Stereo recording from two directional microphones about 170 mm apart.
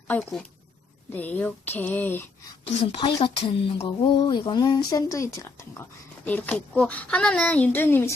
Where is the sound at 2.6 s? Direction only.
35° left (ahead or behind).